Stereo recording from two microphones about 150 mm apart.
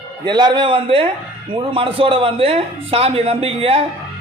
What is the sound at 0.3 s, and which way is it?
A man's voice, 30° right (ahead or behind).